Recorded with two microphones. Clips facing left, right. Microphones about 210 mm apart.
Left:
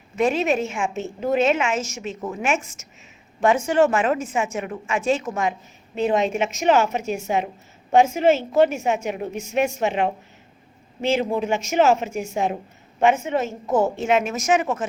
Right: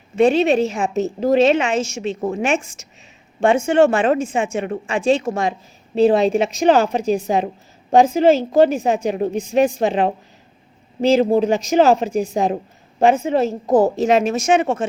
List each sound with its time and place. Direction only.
0.2 s a woman's voice: 30° right (ahead or behind)